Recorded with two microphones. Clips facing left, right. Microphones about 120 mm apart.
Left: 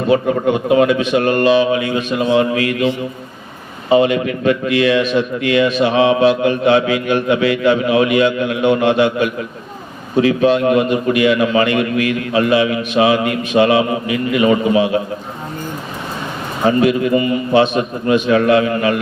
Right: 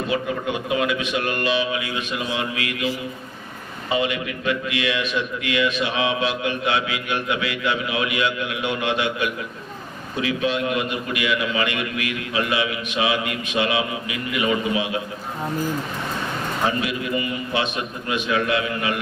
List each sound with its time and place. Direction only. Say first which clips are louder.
0.1 s a man's voice: left 14 dB; 40° left (ahead or behind)
16.6 s a man's voice: left 13 dB; 40° left (ahead or behind)